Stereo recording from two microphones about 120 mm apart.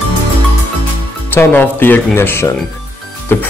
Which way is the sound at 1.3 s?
15° left (ahead or behind).